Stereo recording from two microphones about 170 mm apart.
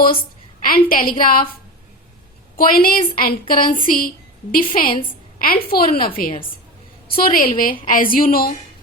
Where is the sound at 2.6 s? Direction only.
60° left (ahead or behind).